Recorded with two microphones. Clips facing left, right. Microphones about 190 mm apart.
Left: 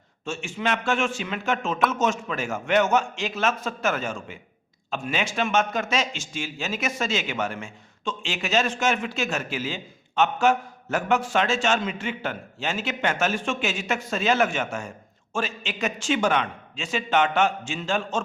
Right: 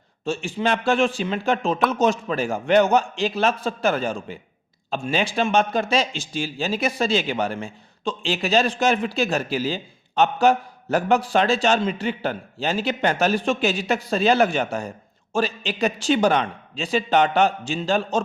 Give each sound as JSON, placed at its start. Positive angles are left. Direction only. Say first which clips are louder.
{"t": 0.3, "sound": "a man's voice", "louder": "right 4 dB", "side_deg": -35}